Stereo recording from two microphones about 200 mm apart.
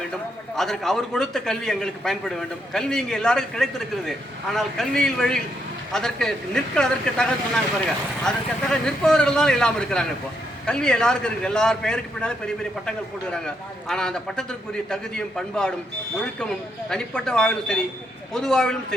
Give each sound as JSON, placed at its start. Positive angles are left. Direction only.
{"t": 0.5, "sound": "a man's voice", "side_deg": 0}
{"t": 8.7, "sound": "a man's voice", "side_deg": 5}
{"t": 16.9, "sound": "a man's voice", "side_deg": 5}